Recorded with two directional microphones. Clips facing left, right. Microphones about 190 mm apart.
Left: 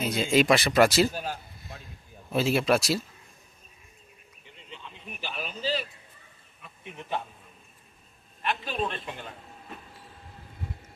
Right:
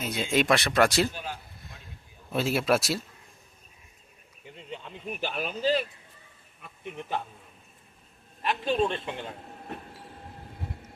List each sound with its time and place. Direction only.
0.0 s speech: centre (ahead or behind)
1.1 s a man's voice: 40° left (ahead or behind)
2.3 s speech: centre (ahead or behind)
4.5 s a sound: 45° right (ahead or behind)
8.4 s a man's voice: 30° right (ahead or behind)